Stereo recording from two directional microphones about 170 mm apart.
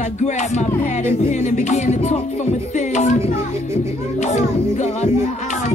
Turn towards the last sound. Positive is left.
turn(degrees=40)  # may be behind; listen again after turning